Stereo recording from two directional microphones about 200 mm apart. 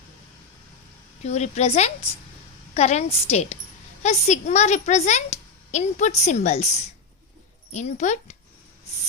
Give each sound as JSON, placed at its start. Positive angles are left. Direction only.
{"t": 1.2, "sound": "a woman's voice", "side_deg": 35}
{"t": 7.7, "sound": "a woman's voice", "side_deg": 35}